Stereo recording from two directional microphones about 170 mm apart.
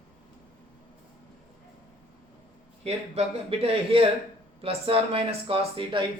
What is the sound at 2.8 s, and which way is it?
A man's voice, 40° right (ahead or behind).